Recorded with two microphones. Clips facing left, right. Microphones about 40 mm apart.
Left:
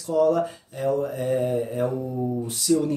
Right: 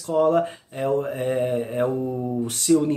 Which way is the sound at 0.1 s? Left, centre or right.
Right.